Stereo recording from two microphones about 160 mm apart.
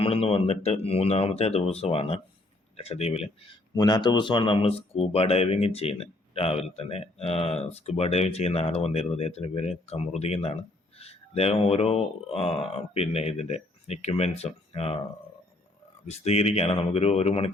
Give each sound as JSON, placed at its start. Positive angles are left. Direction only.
{"t": 0.0, "sound": "speech", "side_deg": 35}
{"t": 3.8, "sound": "speech", "side_deg": 25}
{"t": 16.0, "sound": "speech", "side_deg": 40}